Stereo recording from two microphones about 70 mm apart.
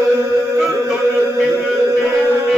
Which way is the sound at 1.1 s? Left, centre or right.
Right.